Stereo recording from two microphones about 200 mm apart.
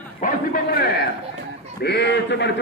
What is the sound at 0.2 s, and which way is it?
A man's voice, 45° left (ahead or behind).